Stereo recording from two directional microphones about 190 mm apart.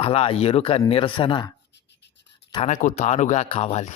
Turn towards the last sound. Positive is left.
turn(degrees=35)  # may be behind; listen again after turning